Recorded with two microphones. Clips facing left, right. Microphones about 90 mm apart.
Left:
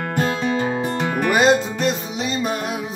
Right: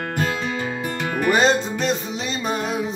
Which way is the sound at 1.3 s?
5° left (ahead or behind).